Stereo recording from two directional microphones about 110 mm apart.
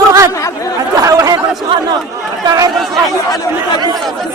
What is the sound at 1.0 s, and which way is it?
Chatter, 35° right (ahead or behind).